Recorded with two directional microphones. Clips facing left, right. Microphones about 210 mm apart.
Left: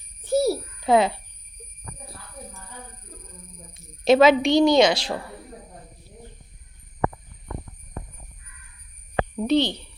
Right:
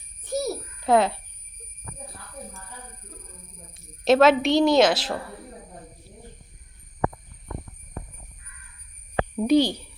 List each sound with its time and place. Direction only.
0.2 s a sound: 30° left (ahead or behind)
0.8 s speech: centre (ahead or behind)
3.8 s a woman's voice: centre (ahead or behind)
9.3 s speech: 10° right (ahead or behind)